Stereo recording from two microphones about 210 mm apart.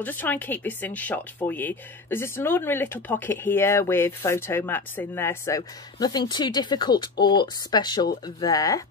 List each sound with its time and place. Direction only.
0.0 s speech: 10° left (ahead or behind)